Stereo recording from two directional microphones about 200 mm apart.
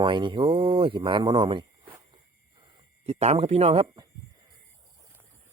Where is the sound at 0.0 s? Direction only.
25° right (ahead or behind).